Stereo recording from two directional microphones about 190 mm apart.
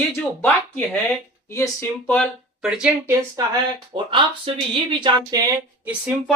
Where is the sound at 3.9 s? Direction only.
25° right (ahead or behind).